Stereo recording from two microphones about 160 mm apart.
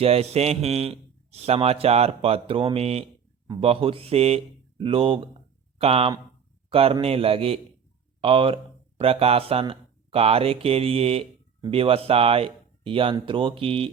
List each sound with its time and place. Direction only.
0.0 s a man's voice: 40° right (ahead or behind)